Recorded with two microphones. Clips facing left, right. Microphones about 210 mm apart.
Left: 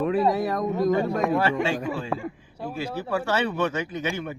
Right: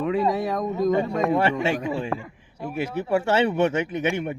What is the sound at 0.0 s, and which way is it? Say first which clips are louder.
A man's voice: left 1 dB; centre (ahead or behind).